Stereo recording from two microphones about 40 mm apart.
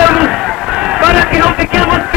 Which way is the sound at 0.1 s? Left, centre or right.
Centre.